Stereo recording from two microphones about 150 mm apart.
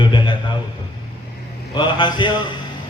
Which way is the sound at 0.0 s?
30° left (ahead or behind).